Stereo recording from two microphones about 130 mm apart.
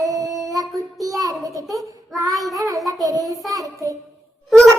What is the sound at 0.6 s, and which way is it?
Child singing, 25° right (ahead or behind).